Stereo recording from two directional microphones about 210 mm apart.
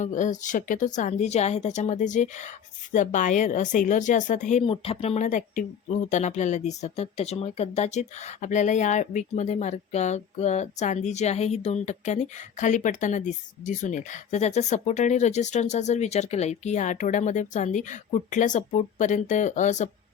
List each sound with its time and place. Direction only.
0.0 s speech: 35° left (ahead or behind)